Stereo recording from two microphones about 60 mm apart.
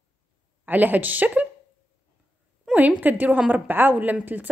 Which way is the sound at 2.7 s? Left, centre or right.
Right.